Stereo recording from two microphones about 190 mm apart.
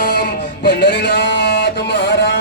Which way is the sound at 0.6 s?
65° left (ahead or behind).